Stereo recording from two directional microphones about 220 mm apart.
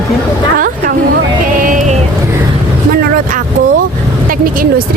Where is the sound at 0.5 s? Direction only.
40° right (ahead or behind).